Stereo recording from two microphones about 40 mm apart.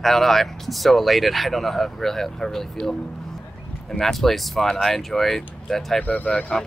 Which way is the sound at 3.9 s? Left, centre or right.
Centre.